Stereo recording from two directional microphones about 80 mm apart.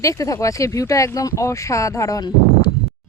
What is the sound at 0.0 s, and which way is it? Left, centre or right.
Speech, left.